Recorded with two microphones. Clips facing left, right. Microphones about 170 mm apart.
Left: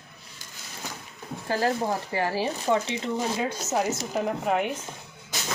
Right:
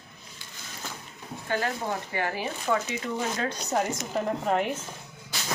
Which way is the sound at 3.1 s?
10° left (ahead or behind).